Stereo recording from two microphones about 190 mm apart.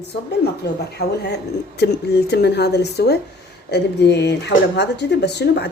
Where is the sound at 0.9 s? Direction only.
60° left (ahead or behind).